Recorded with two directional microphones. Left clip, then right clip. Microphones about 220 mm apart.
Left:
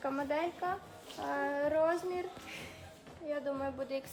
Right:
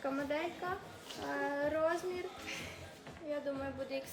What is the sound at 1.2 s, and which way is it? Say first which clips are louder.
Child singing: left 3 dB; 15° left (ahead or behind).